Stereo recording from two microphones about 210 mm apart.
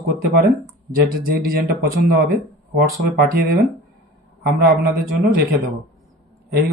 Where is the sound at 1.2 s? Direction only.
45° right (ahead or behind).